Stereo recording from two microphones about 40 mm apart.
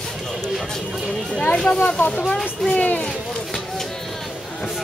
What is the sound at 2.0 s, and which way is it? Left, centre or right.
Speech, left.